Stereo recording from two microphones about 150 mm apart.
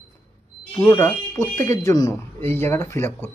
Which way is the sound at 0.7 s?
15° left (ahead or behind).